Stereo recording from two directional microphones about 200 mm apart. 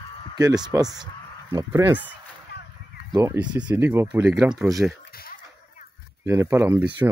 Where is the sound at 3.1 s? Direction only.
10° right (ahead or behind).